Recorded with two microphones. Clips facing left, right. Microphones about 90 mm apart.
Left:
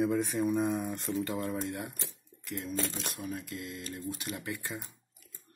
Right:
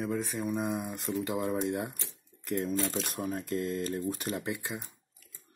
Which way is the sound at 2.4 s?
40° right (ahead or behind).